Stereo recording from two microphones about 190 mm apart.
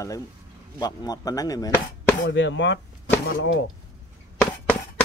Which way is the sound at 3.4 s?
85° left.